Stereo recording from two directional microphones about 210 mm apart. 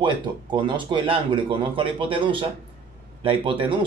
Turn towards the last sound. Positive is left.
turn(degrees=-25)  # may be behind; listen again after turning